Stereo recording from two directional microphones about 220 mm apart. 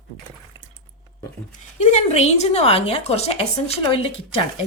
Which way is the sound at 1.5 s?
30° left (ahead or behind).